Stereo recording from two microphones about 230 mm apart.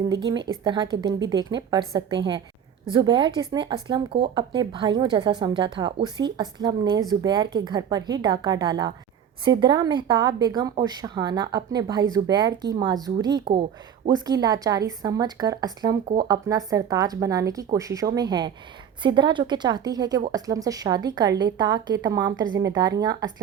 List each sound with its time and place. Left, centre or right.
0.3 s a woman's voice: centre